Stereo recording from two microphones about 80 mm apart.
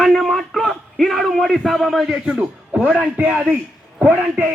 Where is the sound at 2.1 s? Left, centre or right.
Centre.